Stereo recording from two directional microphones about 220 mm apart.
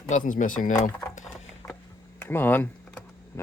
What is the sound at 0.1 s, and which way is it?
Speech, 35° left (ahead or behind).